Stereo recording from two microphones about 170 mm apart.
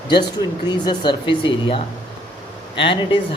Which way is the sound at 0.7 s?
25° left (ahead or behind).